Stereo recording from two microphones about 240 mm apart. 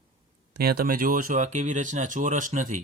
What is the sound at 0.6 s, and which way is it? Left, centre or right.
Speech, right.